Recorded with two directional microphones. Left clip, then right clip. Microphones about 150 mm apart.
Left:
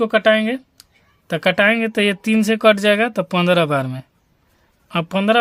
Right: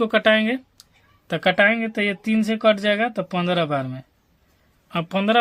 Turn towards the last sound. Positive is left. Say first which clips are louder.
# left 4 dB
turn(degrees=35)  # may be behind; listen again after turning